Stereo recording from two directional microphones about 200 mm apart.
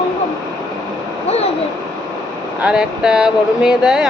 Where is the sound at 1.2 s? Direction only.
30° left (ahead or behind).